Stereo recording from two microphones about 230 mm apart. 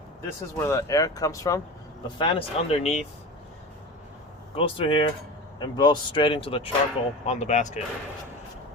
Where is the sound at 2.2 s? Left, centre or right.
Left.